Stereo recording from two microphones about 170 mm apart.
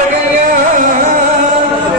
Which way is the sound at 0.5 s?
55° right (ahead or behind).